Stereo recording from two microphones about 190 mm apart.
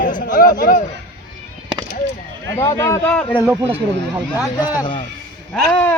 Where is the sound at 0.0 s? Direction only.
45° left (ahead or behind).